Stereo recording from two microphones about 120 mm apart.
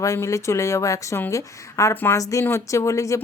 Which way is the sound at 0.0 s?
25° left (ahead or behind).